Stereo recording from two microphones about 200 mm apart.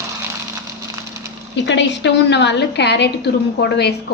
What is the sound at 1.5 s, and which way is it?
A woman's voice, 65° left (ahead or behind).